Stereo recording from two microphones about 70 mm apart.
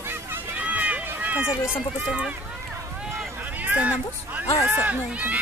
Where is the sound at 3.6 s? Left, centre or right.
Right.